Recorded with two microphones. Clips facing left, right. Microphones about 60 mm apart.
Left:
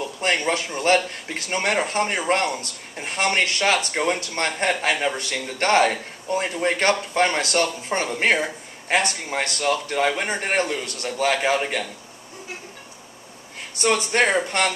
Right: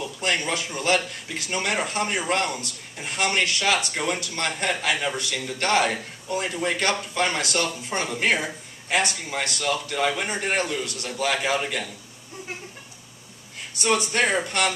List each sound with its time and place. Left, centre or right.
0.0 s a man's voice: left
13.8 s speech: left